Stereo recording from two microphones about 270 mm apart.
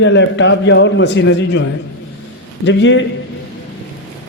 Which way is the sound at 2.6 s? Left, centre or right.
Left.